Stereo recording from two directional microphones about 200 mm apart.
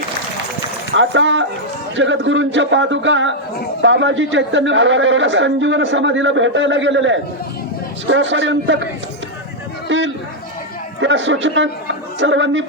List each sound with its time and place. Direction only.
0.9 s a man's voice: 65° right (ahead or behind)
9.9 s a man's voice: 70° right (ahead or behind)